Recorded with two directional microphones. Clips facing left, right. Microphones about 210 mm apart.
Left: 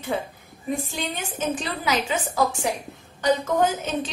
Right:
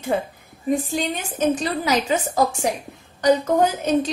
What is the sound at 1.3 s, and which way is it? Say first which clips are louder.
A woman's voice: right 8 dB; 40° right (ahead or behind).